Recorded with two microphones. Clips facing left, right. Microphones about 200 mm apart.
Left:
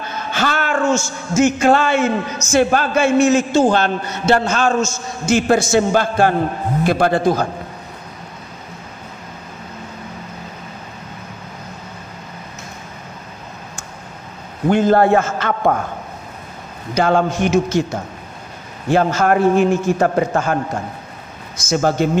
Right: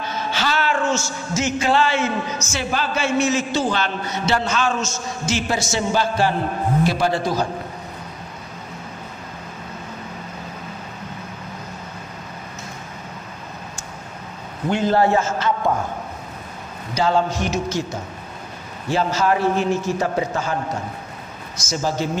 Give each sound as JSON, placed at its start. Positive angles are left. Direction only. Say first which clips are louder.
{"t": 0.0, "sound": "a sound", "louder": "left 3 dB", "side_deg": 55}
{"t": 2.5, "sound": "a man's voice", "louder": "left 10 dB", "side_deg": 50}
{"t": 14.7, "sound": "a man's voice", "louder": "left 5 dB", "side_deg": 50}
{"t": 16.9, "sound": "a man's voice", "louder": "left 4 dB", "side_deg": 55}
{"t": 18.9, "sound": "a man's voice", "louder": "left 5 dB", "side_deg": 55}
{"t": 21.6, "sound": "a man's voice", "louder": "left 7 dB", "side_deg": 55}